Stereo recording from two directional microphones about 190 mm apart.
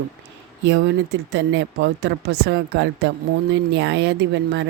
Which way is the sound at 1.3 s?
65° right (ahead or behind).